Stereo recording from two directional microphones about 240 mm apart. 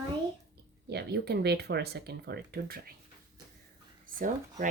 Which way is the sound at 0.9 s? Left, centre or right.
Right.